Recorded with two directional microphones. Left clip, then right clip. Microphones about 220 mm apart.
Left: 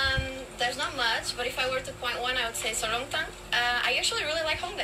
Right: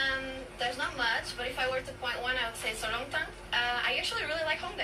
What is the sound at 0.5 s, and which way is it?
A woman's voice, 55° left (ahead or behind).